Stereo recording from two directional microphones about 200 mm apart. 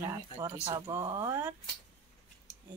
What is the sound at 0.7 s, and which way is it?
Speech, 15° right (ahead or behind).